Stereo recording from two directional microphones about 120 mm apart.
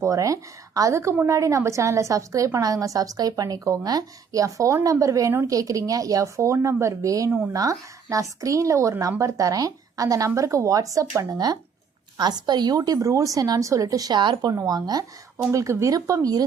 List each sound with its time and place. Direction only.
0.0 s a woman's voice: 30° right (ahead or behind)